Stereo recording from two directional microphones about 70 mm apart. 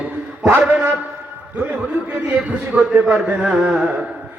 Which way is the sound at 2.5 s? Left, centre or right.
Centre.